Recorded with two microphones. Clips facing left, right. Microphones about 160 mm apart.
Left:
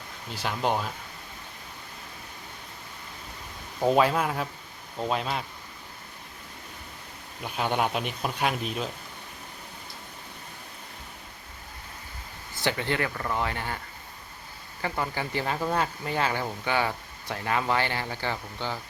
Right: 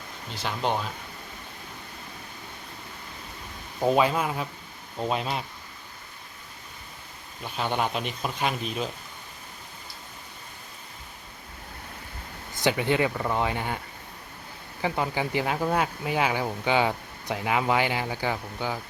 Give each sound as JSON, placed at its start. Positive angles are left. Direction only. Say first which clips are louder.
{"t": 0.3, "sound": "speech", "louder": "even", "side_deg": 5}
{"t": 3.8, "sound": "speech", "louder": "even", "side_deg": 0}
{"t": 7.4, "sound": "speech", "louder": "left 1 dB", "side_deg": 10}
{"t": 12.5, "sound": "speech", "louder": "right 4 dB", "side_deg": -15}
{"t": 14.8, "sound": "speech", "louder": "right 3 dB", "side_deg": -15}